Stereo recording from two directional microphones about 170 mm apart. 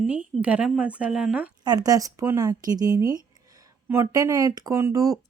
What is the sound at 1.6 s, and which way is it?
Speech, 25° right (ahead or behind).